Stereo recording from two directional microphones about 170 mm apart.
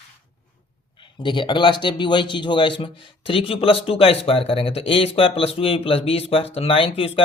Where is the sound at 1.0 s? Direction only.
30° left (ahead or behind).